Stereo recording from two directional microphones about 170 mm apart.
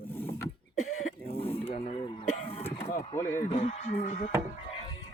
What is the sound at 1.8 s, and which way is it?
Speech, 30° left (ahead or behind).